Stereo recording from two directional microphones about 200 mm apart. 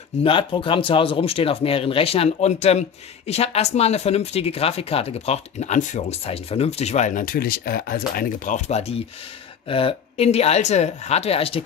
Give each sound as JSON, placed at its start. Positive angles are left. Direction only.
{"t": 0.2, "sound": "speech", "side_deg": 25}